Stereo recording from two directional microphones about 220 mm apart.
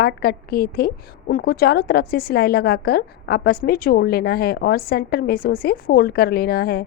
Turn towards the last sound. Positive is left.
turn(degrees=45)  # may be behind; listen again after turning